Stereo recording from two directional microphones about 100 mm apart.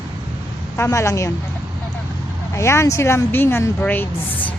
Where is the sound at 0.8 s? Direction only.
30° left (ahead or behind).